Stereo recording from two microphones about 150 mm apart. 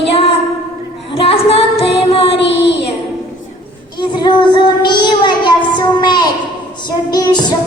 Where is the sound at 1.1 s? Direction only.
40° left (ahead or behind).